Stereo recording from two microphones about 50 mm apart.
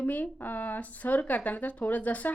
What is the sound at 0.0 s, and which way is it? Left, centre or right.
A woman's voice, left.